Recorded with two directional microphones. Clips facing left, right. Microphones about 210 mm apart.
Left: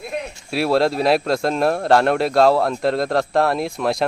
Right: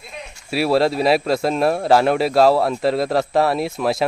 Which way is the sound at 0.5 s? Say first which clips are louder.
Right 1 dB; centre (ahead or behind).